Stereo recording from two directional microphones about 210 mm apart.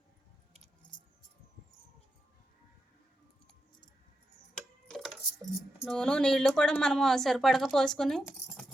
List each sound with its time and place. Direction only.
0.8 s keys jangling: 20° left (ahead or behind)
4.9 s cutlery: centre (ahead or behind)
5.8 s speech: 5° left (ahead or behind)